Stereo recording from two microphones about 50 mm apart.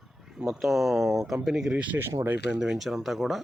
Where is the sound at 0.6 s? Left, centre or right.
Centre.